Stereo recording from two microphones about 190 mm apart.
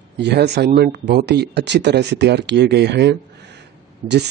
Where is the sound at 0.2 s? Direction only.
65° right (ahead or behind).